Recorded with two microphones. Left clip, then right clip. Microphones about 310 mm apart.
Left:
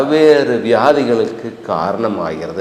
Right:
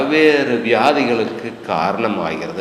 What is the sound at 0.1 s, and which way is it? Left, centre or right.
A man's voice, left.